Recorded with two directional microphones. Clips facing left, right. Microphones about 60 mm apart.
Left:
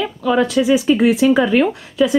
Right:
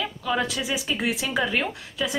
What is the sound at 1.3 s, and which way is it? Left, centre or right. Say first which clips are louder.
Speech: left 11 dB; centre.